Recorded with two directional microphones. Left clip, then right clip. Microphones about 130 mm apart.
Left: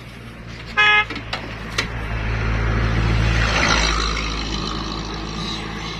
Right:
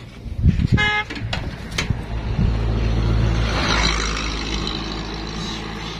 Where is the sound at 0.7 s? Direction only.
40° right (ahead or behind).